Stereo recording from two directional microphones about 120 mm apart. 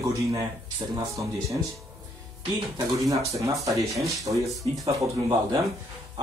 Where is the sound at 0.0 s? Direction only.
25° right (ahead or behind).